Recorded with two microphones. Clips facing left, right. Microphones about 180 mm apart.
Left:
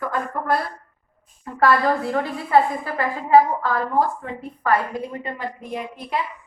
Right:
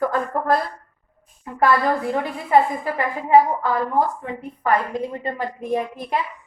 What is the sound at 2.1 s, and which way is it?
A woman's voice, 20° right (ahead or behind).